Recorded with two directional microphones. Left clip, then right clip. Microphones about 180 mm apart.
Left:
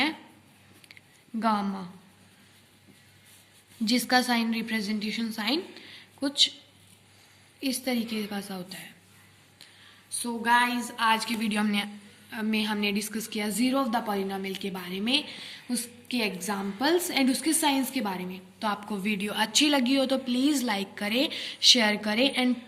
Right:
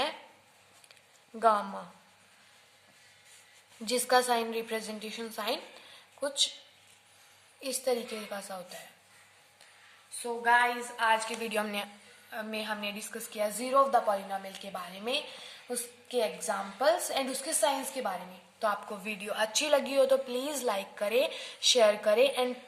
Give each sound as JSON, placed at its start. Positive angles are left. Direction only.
{"t": 1.4, "sound": "a woman's voice", "side_deg": -55}
{"t": 3.8, "sound": "a woman's voice", "side_deg": -55}
{"t": 7.6, "sound": "a woman's voice", "side_deg": -55}
{"t": 10.2, "sound": "a woman's voice", "side_deg": -40}
{"t": 18.6, "sound": "a woman's voice", "side_deg": -45}